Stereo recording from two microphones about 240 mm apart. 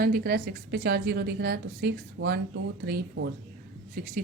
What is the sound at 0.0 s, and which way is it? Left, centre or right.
A woman's voice, right.